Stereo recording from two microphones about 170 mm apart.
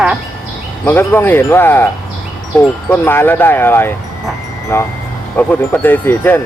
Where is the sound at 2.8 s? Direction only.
10° left (ahead or behind).